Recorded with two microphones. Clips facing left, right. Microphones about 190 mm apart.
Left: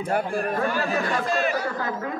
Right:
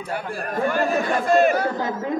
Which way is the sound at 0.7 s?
55° right (ahead or behind).